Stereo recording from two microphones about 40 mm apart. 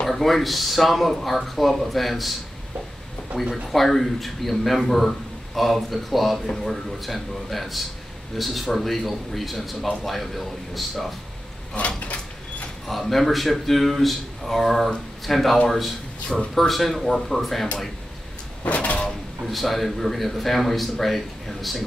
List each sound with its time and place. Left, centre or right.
0.1 s speech: centre
3.6 s speech: centre
12.0 s sliding door: left
12.8 s speech: centre
16.5 s speech: centre
18.7 s a sound: left
19.4 s speech: centre